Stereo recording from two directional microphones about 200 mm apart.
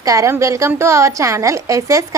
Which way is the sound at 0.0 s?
15° right (ahead or behind).